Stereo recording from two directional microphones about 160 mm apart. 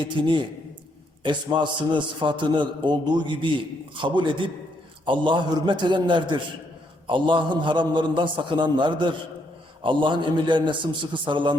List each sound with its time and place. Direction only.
0.0 s a man's voice: 30° right (ahead or behind)